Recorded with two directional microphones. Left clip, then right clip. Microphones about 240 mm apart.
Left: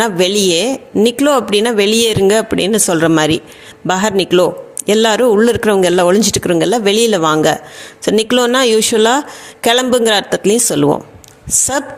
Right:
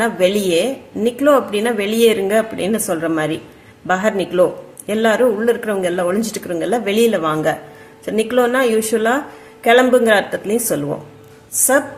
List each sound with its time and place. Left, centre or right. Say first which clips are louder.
0.0 s a man's voice: left 3 dB; left